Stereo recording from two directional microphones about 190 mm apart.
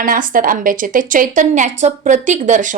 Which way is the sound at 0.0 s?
45° right (ahead or behind).